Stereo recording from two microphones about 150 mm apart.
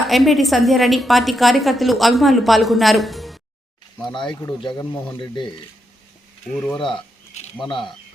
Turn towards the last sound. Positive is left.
turn(degrees=35)  # may be behind; listen again after turning